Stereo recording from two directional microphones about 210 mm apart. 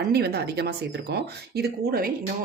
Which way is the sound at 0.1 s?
50° right (ahead or behind).